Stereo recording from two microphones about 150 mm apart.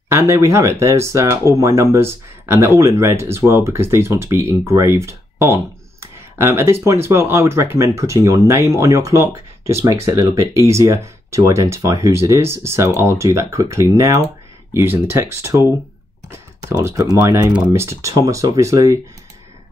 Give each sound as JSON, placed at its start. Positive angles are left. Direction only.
{"t": 0.1, "sound": "speech", "side_deg": -20}
{"t": 17.5, "sound": "speech", "side_deg": -10}
{"t": 17.8, "sound": "speech", "side_deg": -20}